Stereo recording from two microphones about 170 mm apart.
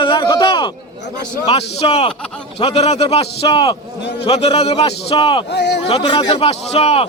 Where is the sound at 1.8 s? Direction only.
35° left (ahead or behind).